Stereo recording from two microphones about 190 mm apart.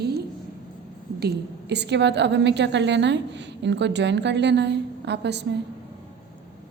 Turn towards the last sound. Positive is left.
turn(degrees=-65)  # may be behind; listen again after turning